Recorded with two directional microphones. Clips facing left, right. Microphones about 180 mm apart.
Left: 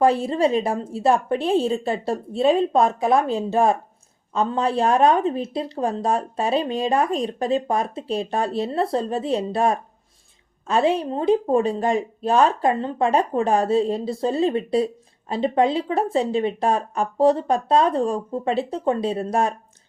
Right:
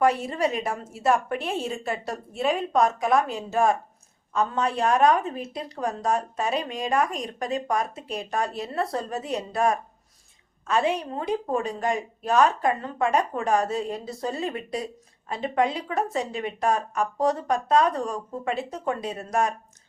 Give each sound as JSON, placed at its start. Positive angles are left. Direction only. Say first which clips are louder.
{"t": 0.0, "sound": "a woman's voice", "louder": "left 5 dB", "side_deg": 30}